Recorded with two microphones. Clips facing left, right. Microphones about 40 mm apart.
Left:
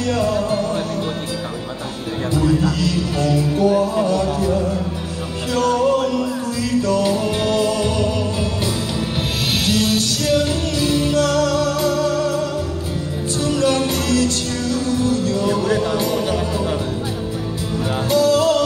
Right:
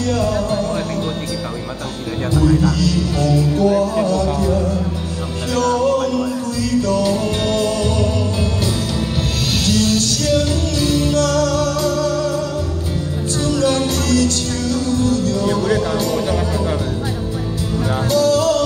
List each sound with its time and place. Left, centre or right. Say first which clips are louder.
0.0 s music: even; left
2.3 s speech: right 2 dB; left
4.5 s music: right 1 dB; left
9.5 s music: right 1 dB; left
13.5 s music: right 1 dB; left
15.6 s a sound: right 1 dB; right
16.2 s music: right 1 dB; right
18.0 s music: even; left